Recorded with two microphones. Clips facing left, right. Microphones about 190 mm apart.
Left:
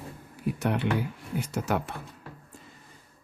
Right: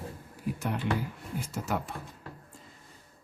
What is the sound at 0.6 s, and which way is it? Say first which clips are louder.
Speech: left 4 dB; 70° left (ahead or behind).